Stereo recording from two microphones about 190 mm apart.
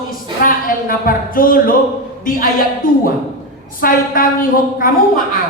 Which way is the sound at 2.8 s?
45° left (ahead or behind).